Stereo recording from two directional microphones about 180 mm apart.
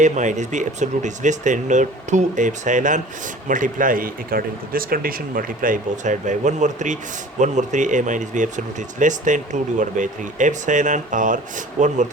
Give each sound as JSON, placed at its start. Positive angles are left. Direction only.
{"t": 0.0, "sound": "a man's voice", "side_deg": -40}